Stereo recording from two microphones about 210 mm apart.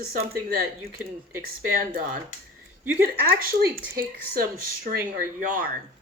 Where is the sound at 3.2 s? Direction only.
45° right (ahead or behind).